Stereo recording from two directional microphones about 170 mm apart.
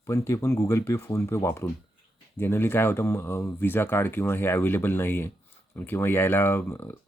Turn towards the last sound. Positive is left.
turn(degrees=10)  # may be behind; listen again after turning